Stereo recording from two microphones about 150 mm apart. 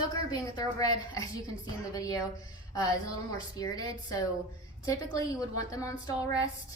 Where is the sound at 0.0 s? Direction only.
25° left (ahead or behind).